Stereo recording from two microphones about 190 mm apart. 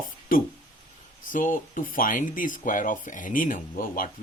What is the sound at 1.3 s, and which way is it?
Speech, 45° left (ahead or behind).